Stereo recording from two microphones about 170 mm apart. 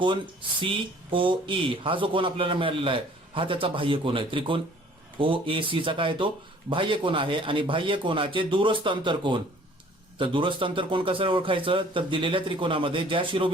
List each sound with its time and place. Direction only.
0.6 s speech: 30° right (ahead or behind)